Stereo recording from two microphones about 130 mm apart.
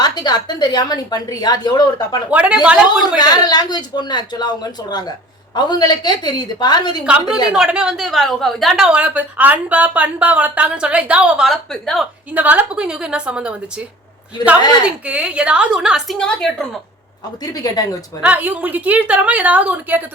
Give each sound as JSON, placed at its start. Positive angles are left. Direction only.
{"t": 0.0, "sound": "a woman's voice", "side_deg": 30}
{"t": 2.3, "sound": "a woman's voice", "side_deg": -10}
{"t": 3.2, "sound": "a woman's voice", "side_deg": 30}
{"t": 7.0, "sound": "a woman's voice", "side_deg": -5}
{"t": 12.3, "sound": "a woman's voice", "side_deg": -10}
{"t": 14.8, "sound": "a woman's voice", "side_deg": -10}
{"t": 17.4, "sound": "speech", "side_deg": 30}
{"t": 18.2, "sound": "a woman's voice", "side_deg": -15}